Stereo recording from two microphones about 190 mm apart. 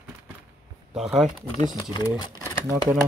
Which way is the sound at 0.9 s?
Centre (ahead or behind).